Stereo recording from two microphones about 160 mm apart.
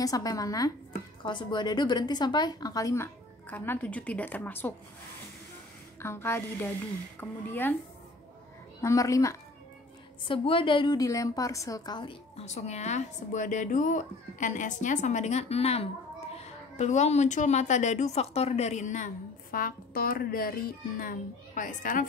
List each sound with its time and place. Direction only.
0.0 s a woman's voice: 20° left (ahead or behind)
5.9 s a woman's voice: 15° left (ahead or behind)
8.8 s a woman's voice: 20° left (ahead or behind)
10.2 s a woman's voice: 35° left (ahead or behind); by 21.1 s 70° left (ahead or behind)
21.5 s a woman's voice: 55° left (ahead or behind)